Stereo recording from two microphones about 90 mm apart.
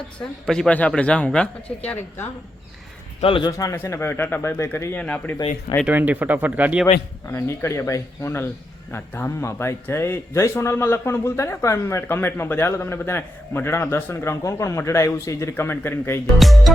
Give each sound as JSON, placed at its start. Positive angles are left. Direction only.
{"t": 0.2, "sound": "speech", "side_deg": 5}
{"t": 3.7, "sound": "a man's voice", "side_deg": 30}
{"t": 5.8, "sound": "speech", "side_deg": -20}
{"t": 7.3, "sound": "a man's voice", "side_deg": 30}
{"t": 16.4, "sound": "speech", "side_deg": 0}